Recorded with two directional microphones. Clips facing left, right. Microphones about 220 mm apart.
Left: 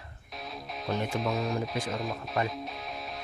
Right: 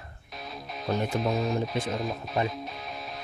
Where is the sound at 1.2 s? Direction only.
Centre (ahead or behind).